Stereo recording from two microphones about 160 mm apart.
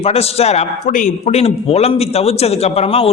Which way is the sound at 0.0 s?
40° left (ahead or behind).